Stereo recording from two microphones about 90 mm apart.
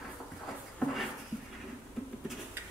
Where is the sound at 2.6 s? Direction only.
25° right (ahead or behind).